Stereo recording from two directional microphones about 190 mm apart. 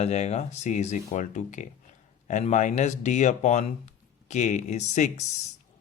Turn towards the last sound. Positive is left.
turn(degrees=35)  # may be behind; listen again after turning